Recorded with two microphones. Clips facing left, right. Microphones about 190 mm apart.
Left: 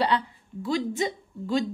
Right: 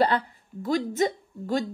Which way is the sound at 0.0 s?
50° right (ahead or behind).